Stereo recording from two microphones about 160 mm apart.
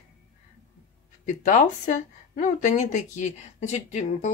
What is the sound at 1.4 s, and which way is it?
Speech, 50° left (ahead or behind).